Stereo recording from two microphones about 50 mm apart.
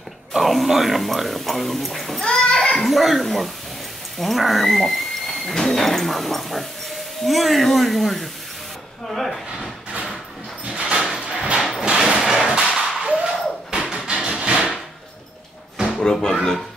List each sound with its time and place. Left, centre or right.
0.3 s speech: centre
2.2 s children playing: centre
2.8 s speech: centre
10.6 s sliding door: centre
11.5 s a sound: centre
14.4 s drawer open or close: centre
15.9 s speech: centre